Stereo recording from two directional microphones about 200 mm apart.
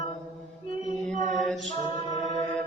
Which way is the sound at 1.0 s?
Centre (ahead or behind).